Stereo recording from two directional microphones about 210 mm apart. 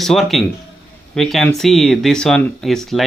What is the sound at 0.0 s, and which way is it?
Speech, centre (ahead or behind).